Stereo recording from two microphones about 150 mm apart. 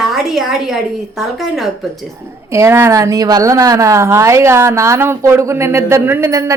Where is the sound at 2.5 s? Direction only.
20° right (ahead or behind).